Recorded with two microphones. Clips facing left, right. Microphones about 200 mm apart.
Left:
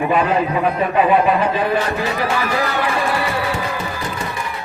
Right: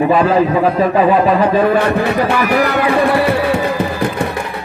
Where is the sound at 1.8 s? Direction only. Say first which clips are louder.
Right 6 dB; 60° right (ahead or behind).